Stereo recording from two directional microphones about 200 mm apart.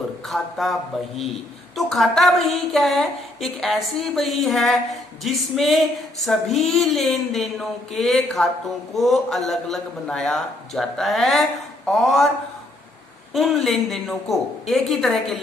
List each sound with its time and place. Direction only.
0.3 s a man's voice: centre (ahead or behind)
13.7 s a man's voice: centre (ahead or behind)